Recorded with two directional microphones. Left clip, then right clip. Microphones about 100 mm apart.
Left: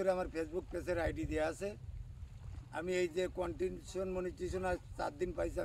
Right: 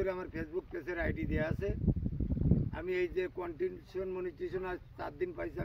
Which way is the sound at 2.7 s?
30° left (ahead or behind).